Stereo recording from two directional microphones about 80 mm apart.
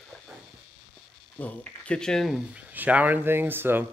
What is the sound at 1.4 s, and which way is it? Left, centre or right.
Speech, centre.